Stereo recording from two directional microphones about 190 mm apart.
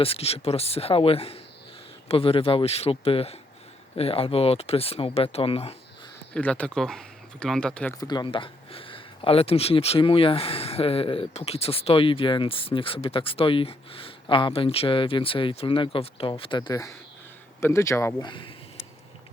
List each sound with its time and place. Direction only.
0.0 s speech: 30° left (ahead or behind)
6.3 s speech: 5° left (ahead or behind)
7.9 s speech: 20° left (ahead or behind)